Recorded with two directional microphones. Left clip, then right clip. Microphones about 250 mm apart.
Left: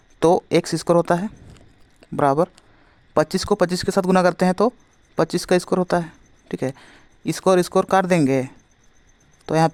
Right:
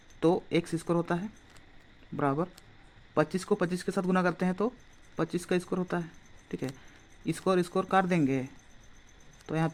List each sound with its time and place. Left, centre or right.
0.2 s speech: left
7.3 s speech: left
9.5 s speech: left